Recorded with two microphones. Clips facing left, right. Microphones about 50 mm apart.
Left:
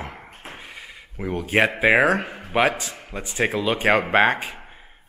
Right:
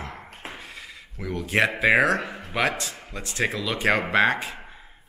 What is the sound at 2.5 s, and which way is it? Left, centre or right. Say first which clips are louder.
Speech: left 5 dB; centre.